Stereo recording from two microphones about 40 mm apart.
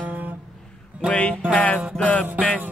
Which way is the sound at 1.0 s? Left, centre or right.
Left.